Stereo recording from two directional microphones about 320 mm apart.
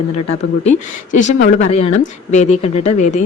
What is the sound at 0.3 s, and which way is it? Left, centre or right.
Speech, left.